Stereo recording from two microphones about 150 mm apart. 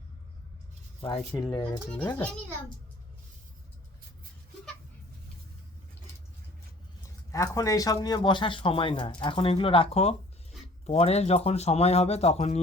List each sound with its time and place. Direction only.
1.4 s speech: 30° left (ahead or behind)
2.0 s a child's voice: 10° left (ahead or behind)
7.3 s speech: 20° left (ahead or behind); by 12.5 s 45° left (ahead or behind)